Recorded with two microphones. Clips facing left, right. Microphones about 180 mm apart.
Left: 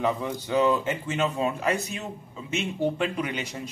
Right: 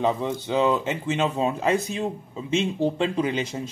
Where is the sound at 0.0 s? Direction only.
20° right (ahead or behind).